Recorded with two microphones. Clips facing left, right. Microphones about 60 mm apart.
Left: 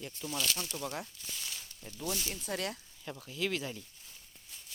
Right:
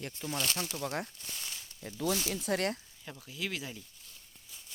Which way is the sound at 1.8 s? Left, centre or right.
Right.